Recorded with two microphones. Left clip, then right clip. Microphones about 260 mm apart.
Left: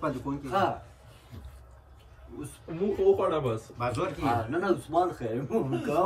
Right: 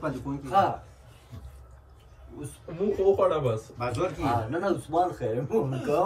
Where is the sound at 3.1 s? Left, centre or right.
Centre.